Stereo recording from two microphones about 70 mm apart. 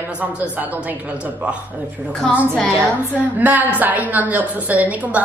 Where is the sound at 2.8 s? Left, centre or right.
Right.